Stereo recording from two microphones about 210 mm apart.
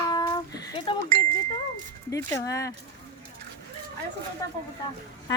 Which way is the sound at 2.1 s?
15° left (ahead or behind).